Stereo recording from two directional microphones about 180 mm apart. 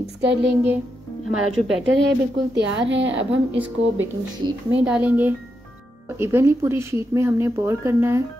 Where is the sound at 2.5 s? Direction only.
80° right.